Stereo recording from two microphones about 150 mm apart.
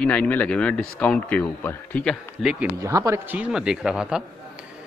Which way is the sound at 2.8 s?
20° right (ahead or behind).